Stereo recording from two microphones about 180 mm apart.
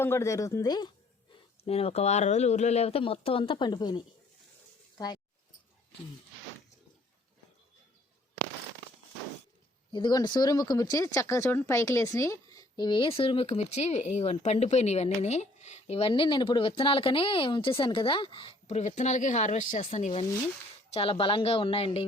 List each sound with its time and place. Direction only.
0.0 s a woman's voice: 15° left (ahead or behind)
1.6 s speech: 35° left (ahead or behind)
9.9 s speech: 25° left (ahead or behind)